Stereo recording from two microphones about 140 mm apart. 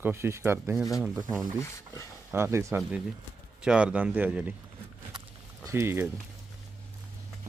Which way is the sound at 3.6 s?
5° right (ahead or behind).